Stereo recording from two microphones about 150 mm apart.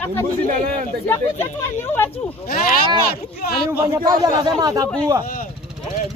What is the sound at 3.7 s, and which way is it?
Speech, 15° right (ahead or behind).